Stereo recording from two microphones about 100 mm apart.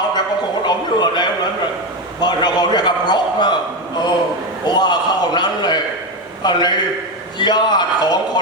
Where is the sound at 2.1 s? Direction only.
45° left (ahead or behind).